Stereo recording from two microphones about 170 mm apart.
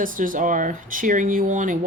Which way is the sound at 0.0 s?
50° right (ahead or behind).